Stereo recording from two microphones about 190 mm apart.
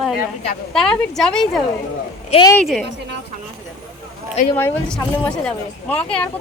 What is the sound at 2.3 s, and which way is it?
Speech, 30° left (ahead or behind).